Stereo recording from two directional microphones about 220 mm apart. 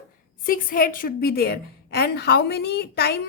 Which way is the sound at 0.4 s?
40° left (ahead or behind).